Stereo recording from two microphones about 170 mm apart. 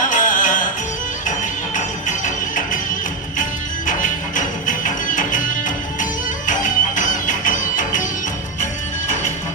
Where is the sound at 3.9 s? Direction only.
50° left (ahead or behind).